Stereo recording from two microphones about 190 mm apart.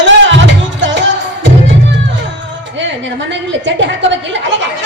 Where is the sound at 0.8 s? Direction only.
70° right (ahead or behind).